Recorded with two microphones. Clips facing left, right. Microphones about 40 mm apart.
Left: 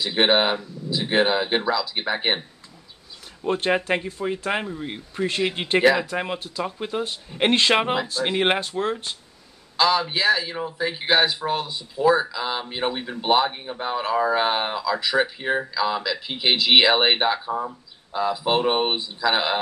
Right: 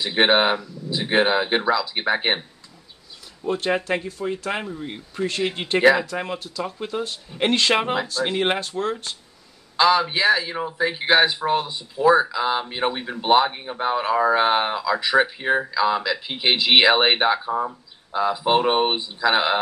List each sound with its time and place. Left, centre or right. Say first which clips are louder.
0.0 s speech: right 1 dB; centre
3.4 s speech: left 1 dB; left
3.7 s speech: left 1 dB; centre
9.8 s speech: right 3 dB; centre